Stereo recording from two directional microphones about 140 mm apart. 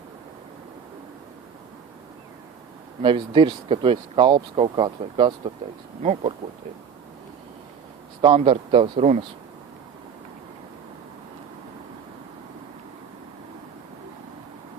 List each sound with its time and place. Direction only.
3.0 s speech: 40° right (ahead or behind)
6.0 s speech: 55° right (ahead or behind)
8.2 s speech: 40° right (ahead or behind)